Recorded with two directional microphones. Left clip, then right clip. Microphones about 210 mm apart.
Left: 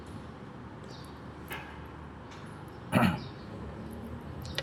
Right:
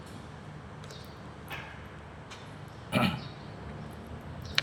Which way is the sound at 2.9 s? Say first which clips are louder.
Left 1 dB; 15° left (ahead or behind).